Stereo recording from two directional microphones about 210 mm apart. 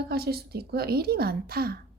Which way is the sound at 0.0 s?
50° right (ahead or behind).